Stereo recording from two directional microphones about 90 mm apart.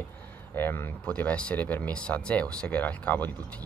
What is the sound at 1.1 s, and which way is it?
Speech, 15° left (ahead or behind).